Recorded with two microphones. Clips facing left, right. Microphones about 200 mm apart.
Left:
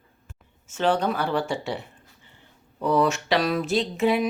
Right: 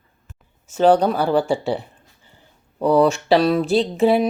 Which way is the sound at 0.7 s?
35° right (ahead or behind).